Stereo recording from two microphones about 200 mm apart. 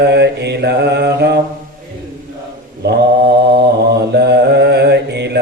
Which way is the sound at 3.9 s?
55° right (ahead or behind).